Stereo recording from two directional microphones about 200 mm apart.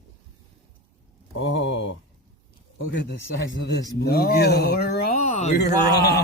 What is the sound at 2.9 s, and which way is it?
Speech, 60° left (ahead or behind).